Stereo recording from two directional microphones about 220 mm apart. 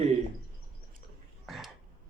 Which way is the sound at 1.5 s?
Centre (ahead or behind).